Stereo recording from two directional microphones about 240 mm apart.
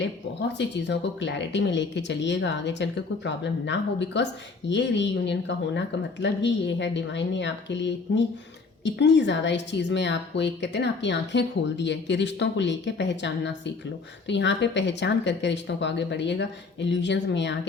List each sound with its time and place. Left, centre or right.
0.5 s speech: left